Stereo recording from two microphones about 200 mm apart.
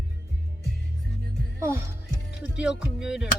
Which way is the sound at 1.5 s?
15° right (ahead or behind).